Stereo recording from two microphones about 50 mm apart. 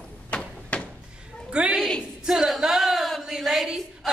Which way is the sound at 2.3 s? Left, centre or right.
Centre.